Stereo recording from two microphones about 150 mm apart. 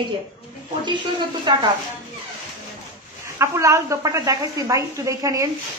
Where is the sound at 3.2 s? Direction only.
20° right (ahead or behind).